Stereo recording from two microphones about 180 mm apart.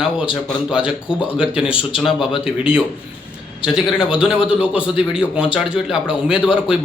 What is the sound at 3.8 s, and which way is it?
A man's voice, 5° right (ahead or behind).